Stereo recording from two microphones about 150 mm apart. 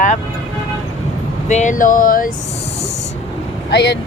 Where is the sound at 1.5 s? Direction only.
55° left (ahead or behind).